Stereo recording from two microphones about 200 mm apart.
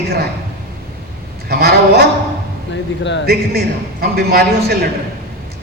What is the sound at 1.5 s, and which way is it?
Speech, 50° right (ahead or behind).